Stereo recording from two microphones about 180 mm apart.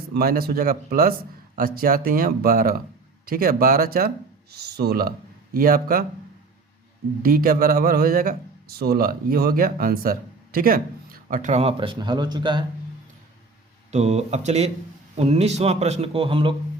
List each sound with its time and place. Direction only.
0.1 s a man's voice: 60° right (ahead or behind)
7.2 s a man's voice: 55° right (ahead or behind); by 12.6 s 25° right (ahead or behind)
13.9 s a man's voice: 35° right (ahead or behind)